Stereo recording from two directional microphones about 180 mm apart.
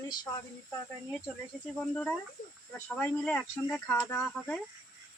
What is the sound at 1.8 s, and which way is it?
Speech, 5° left (ahead or behind).